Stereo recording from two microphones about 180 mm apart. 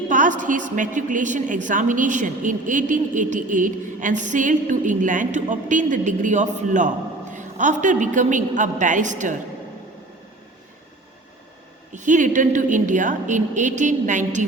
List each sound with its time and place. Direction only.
0.1 s a woman's voice: 45° right (ahead or behind)
11.9 s a woman's voice: 45° right (ahead or behind)